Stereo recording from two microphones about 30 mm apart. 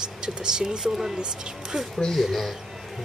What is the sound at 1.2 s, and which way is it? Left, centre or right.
Speech, right.